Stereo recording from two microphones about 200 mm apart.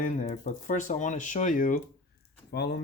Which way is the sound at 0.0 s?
40° left (ahead or behind).